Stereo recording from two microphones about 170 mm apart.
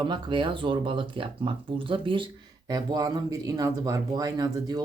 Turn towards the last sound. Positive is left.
turn(degrees=-20)  # may be behind; listen again after turning